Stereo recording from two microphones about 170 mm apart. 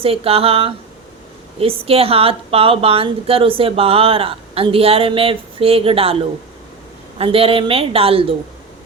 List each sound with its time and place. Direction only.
0.0 s a woman's voice: 35° right (ahead or behind)